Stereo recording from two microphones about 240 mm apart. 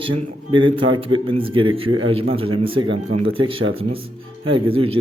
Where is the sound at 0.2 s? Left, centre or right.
Right.